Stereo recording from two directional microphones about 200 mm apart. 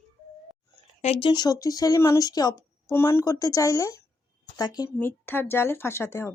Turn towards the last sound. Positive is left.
turn(degrees=15)  # may be behind; listen again after turning